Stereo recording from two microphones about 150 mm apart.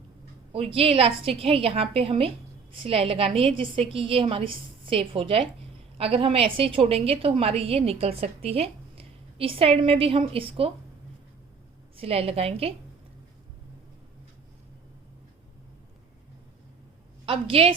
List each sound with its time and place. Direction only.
0.5 s a woman's voice: 40° right (ahead or behind)
11.9 s a woman's voice: 40° right (ahead or behind)
17.2 s a woman's voice: 35° right (ahead or behind)